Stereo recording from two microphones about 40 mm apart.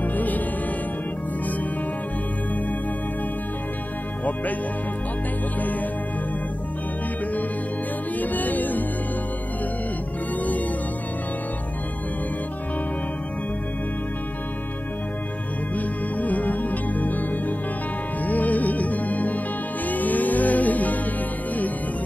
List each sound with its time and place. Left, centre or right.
0.0 s music: left
8.2 s music: left
15.7 s music: left